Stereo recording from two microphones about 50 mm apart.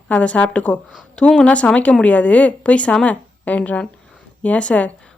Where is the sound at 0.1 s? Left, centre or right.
Left.